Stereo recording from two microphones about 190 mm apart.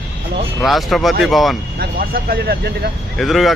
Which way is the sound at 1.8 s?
55° right (ahead or behind).